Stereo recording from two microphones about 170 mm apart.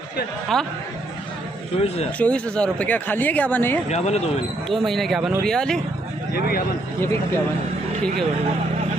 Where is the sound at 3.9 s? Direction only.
40° left (ahead or behind).